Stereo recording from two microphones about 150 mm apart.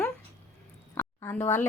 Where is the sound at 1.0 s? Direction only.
15° left (ahead or behind).